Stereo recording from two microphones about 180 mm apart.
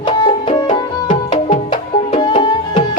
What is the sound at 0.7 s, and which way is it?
Tabla, 25° left (ahead or behind).